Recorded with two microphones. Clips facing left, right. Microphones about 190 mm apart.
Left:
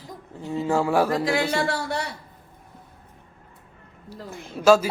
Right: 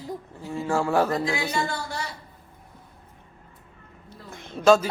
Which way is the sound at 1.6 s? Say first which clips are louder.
Left 4 dB; 70° left (ahead or behind).